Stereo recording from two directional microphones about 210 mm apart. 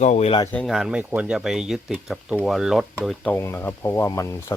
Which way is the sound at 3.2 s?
10° left (ahead or behind).